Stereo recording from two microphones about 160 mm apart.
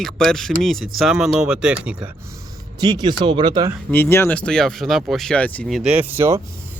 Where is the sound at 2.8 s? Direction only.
30° right (ahead or behind).